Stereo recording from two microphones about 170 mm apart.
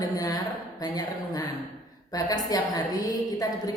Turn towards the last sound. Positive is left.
turn(degrees=20)  # may be behind; listen again after turning